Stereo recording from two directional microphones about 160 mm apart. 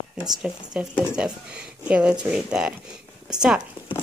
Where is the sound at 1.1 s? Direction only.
5° right (ahead or behind).